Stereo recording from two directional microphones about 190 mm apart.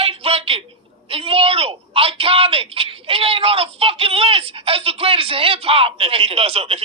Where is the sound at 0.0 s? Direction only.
30° right (ahead or behind).